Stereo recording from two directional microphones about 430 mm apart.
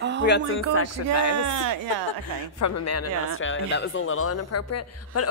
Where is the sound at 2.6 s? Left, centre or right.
Left.